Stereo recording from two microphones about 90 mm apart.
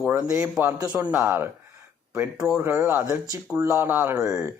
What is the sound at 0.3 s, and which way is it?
Speech, 35° right (ahead or behind).